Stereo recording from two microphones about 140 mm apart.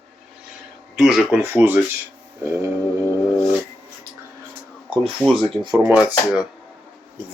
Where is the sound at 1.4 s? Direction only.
15° right (ahead or behind).